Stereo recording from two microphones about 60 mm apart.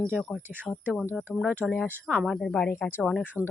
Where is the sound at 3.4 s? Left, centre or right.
Left.